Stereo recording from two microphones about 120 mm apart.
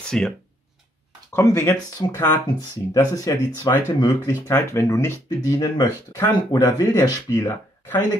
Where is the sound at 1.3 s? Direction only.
25° left (ahead or behind).